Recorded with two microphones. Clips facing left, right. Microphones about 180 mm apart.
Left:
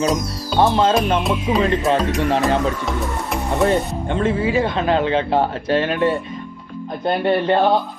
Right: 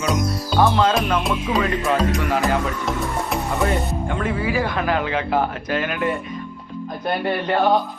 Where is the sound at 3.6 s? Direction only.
25° left (ahead or behind).